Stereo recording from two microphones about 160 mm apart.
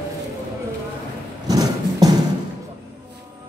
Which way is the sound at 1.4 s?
25° right (ahead or behind).